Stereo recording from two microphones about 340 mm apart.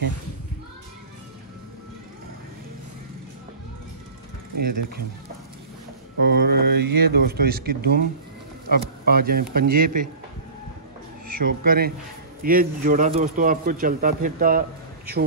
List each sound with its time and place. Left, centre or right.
6.2 s speech: right
11.2 s speech: right